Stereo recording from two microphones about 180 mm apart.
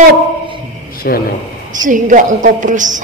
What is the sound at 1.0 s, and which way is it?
Speech, 55° left (ahead or behind).